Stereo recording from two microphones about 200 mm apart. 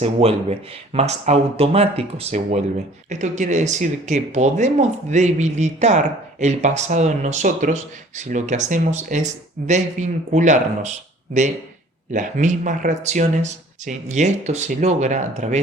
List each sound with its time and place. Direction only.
0.0 s speech: 30° right (ahead or behind)
12.1 s speech: 40° right (ahead or behind)